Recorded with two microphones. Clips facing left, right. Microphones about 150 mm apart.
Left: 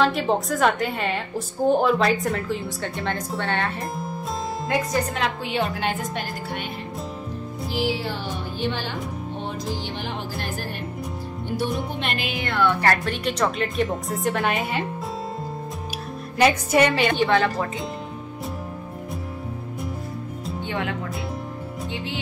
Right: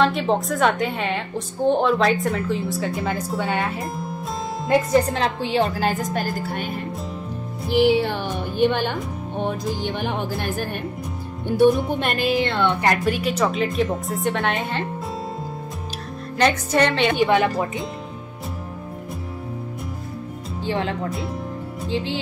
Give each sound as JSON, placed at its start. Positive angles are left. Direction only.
{"t": 0.0, "sound": "a woman's voice", "side_deg": 0}
{"t": 4.9, "sound": "a woman's voice", "side_deg": -30}
{"t": 6.1, "sound": "music", "side_deg": -45}
{"t": 7.7, "sound": "music", "side_deg": -60}
{"t": 12.4, "sound": "speech", "side_deg": -25}
{"t": 13.0, "sound": "a woman's voice", "side_deg": -5}
{"t": 16.3, "sound": "a woman's voice", "side_deg": 10}
{"t": 17.2, "sound": "speech", "side_deg": -15}
{"t": 20.6, "sound": "speech", "side_deg": -25}
{"t": 21.9, "sound": "speech", "side_deg": -30}